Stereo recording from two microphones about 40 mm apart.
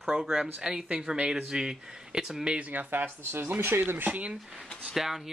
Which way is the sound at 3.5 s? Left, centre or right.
Right.